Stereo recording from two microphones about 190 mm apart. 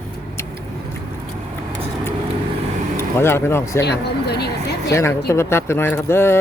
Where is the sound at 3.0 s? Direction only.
10° left (ahead or behind).